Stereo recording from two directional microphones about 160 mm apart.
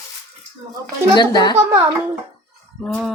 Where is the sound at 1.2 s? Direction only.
25° left (ahead or behind).